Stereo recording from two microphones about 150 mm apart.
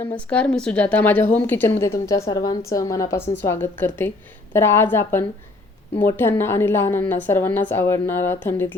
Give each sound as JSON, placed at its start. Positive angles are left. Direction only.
{"t": 0.0, "sound": "a woman's voice", "side_deg": 10}